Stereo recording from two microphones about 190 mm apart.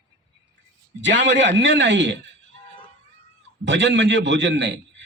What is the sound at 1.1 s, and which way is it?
A man's voice, 70° right (ahead or behind).